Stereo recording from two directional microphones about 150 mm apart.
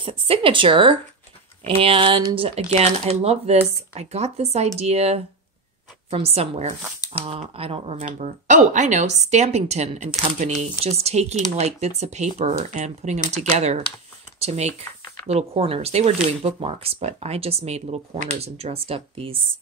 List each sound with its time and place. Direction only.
0.0 s speech: 35° right (ahead or behind)
8.0 s speech: 55° right (ahead or behind); by 19.4 s 35° right (ahead or behind)